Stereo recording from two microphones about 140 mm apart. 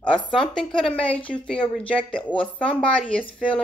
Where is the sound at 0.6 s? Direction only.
5° left (ahead or behind).